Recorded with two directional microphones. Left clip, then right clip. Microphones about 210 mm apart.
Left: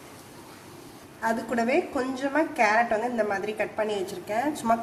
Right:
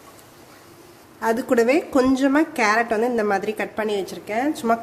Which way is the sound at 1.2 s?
50° right (ahead or behind).